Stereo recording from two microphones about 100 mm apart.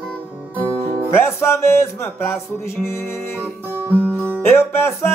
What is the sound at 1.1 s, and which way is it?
Music, 25° left (ahead or behind).